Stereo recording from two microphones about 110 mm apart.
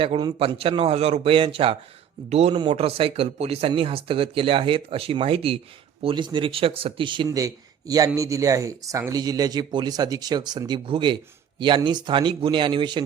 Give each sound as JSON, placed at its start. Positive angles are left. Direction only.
{"t": 0.3, "sound": "speech", "side_deg": -55}
{"t": 2.3, "sound": "speech", "side_deg": -70}
{"t": 3.7, "sound": "speech", "side_deg": -55}
{"t": 7.3, "sound": "speech", "side_deg": -30}